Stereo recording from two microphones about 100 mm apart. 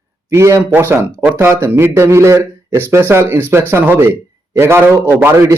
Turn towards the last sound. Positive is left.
turn(degrees=-25)  # may be behind; listen again after turning